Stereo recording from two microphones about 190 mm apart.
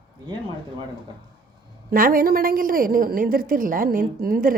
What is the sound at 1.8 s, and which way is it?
A woman's voice, 50° right (ahead or behind).